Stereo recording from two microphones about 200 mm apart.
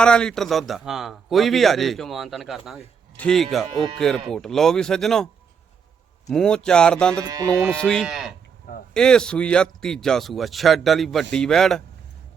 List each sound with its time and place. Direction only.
0.0 s a man's voice: 5° left (ahead or behind)
7.3 s speech: 15° right (ahead or behind)
7.8 s a man's voice: 5° left (ahead or behind)